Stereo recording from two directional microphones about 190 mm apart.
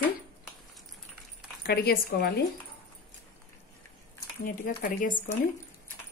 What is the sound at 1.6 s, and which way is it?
Speech, 55° left (ahead or behind).